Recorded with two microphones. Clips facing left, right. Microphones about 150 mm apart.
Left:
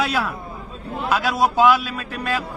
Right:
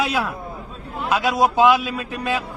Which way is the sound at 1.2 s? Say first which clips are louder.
Right 1 dB; 20° right (ahead or behind).